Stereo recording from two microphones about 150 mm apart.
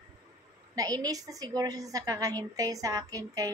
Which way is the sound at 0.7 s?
25° right (ahead or behind).